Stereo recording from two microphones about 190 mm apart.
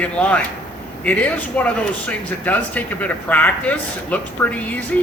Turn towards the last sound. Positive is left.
turn(degrees=10)  # may be behind; listen again after turning